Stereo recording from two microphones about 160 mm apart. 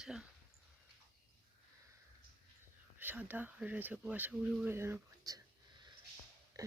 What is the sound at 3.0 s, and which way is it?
Speech, 10° right (ahead or behind).